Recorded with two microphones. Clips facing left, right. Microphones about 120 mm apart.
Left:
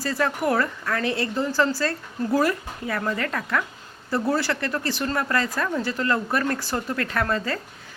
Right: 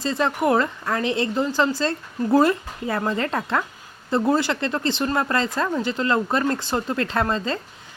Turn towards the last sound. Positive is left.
turn(degrees=-25)  # may be behind; listen again after turning